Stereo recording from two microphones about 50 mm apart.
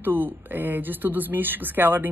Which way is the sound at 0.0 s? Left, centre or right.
Right.